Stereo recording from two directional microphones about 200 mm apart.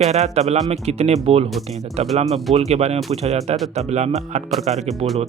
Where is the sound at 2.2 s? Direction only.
Centre (ahead or behind).